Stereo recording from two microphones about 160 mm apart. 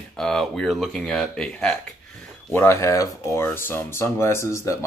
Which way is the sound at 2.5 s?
15° left (ahead or behind).